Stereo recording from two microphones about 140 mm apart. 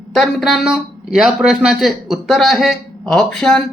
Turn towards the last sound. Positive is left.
turn(degrees=5)  # may be behind; listen again after turning